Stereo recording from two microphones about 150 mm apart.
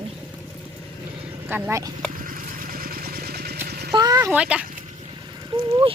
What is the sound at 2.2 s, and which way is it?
Vehicle, 70° right (ahead or behind).